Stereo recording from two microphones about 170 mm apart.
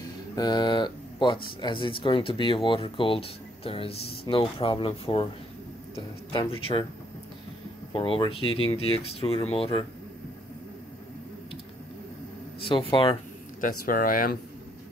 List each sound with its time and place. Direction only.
0.4 s speech: 25° left (ahead or behind)
7.9 s speech: 30° left (ahead or behind)
12.6 s speech: 30° left (ahead or behind)
13.6 s speech: 55° left (ahead or behind)